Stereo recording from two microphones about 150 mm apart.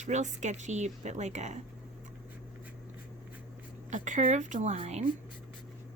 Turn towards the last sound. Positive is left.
turn(degrees=-50)  # may be behind; listen again after turning